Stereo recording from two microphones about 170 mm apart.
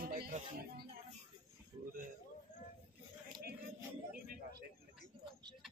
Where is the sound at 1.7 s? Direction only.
35° right (ahead or behind).